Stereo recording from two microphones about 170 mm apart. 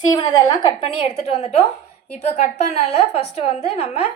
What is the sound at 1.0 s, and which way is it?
A woman's voice, 35° left (ahead or behind).